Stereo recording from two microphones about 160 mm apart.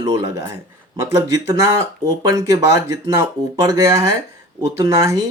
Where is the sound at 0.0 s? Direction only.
20° right (ahead or behind).